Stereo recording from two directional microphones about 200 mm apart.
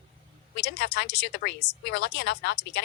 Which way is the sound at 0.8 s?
55° left (ahead or behind).